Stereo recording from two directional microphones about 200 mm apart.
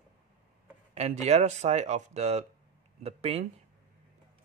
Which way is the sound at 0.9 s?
35° right (ahead or behind).